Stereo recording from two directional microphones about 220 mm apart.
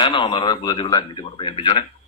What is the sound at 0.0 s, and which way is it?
A man's voice, 20° left (ahead or behind).